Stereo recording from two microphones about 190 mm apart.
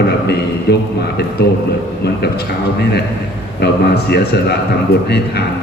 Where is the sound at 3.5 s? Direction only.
60° left (ahead or behind).